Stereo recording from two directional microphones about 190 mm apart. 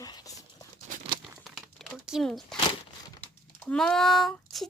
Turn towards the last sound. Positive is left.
turn(degrees=0)  # may be behind; listen again after turning